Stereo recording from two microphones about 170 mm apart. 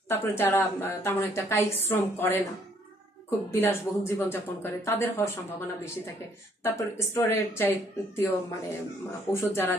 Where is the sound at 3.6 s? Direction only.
15° left (ahead or behind).